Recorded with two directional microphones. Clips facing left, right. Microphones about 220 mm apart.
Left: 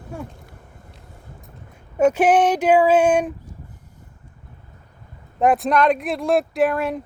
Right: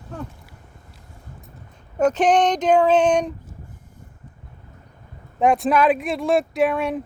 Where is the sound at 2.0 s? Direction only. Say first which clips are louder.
Left 2 dB; 10° left (ahead or behind).